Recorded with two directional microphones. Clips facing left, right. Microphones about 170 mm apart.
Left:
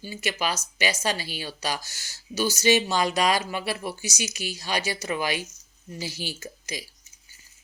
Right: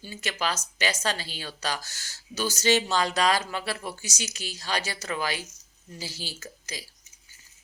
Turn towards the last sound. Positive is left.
turn(degrees=15)  # may be behind; listen again after turning